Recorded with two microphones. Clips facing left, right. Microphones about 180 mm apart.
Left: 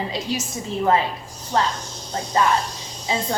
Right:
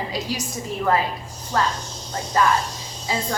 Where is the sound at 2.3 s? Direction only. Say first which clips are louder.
Even; 25° left (ahead or behind).